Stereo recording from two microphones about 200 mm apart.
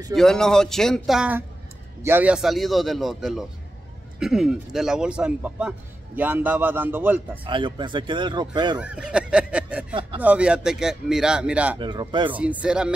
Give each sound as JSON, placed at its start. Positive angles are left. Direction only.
{"t": 0.1, "sound": "a man's voice", "side_deg": 0}
{"t": 7.4, "sound": "speech", "side_deg": -25}
{"t": 8.7, "sound": "speech", "side_deg": -5}
{"t": 11.8, "sound": "speech", "side_deg": -25}
{"t": 12.4, "sound": "speech", "side_deg": -5}